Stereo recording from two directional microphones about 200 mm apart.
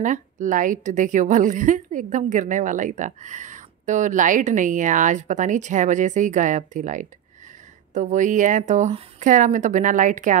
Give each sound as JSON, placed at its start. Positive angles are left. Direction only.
{"t": 0.0, "sound": "a woman's voice", "side_deg": -40}